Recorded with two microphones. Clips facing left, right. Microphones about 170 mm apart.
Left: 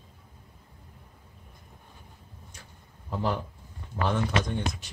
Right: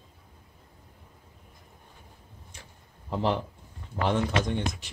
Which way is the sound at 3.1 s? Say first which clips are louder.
Right 2 dB; 25° right (ahead or behind).